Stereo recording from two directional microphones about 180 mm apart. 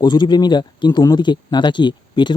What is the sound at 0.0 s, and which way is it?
Speech, 25° left (ahead or behind).